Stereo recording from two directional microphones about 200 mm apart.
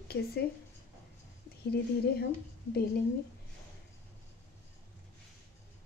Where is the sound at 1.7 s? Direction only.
55° left (ahead or behind).